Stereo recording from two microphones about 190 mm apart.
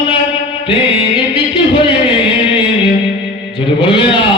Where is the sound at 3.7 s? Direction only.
25° left (ahead or behind).